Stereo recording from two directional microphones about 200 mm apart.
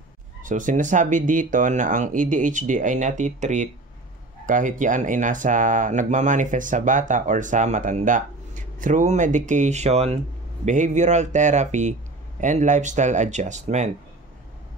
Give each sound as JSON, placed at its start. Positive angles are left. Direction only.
{"t": 0.4, "sound": "speech", "side_deg": -40}